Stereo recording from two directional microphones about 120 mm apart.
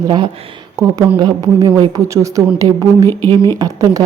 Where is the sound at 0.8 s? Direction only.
25° right (ahead or behind).